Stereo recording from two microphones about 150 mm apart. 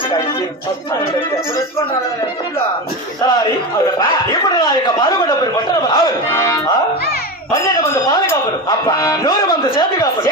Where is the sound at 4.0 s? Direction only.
25° left (ahead or behind).